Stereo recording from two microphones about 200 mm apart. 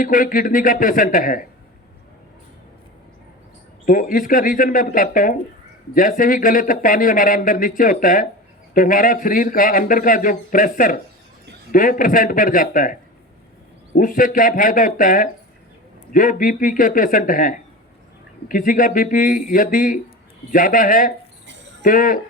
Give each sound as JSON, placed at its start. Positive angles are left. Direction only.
{"t": 0.0, "sound": "speech", "side_deg": 45}
{"t": 3.8, "sound": "speech", "side_deg": 45}